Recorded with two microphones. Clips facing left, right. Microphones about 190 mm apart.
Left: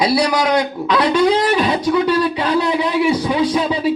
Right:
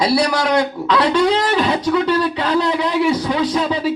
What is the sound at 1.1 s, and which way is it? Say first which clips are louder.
Speech: left 1 dB; 10° left (ahead or behind).